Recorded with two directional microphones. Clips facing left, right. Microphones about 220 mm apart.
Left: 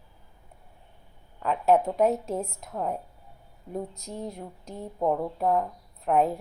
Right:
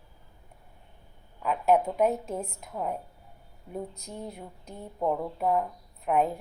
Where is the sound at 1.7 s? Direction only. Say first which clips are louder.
Left 2 dB; centre (ahead or behind).